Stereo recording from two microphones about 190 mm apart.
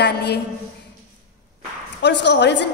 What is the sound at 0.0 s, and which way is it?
Speech, 60° left (ahead or behind).